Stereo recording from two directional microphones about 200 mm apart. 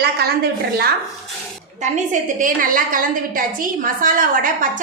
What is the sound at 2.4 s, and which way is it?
A woman's voice, 45° right (ahead or behind).